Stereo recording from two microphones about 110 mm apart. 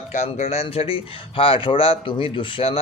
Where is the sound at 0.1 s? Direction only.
80° left.